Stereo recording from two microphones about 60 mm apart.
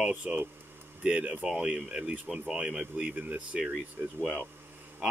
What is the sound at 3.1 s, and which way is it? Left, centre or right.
Speech, right.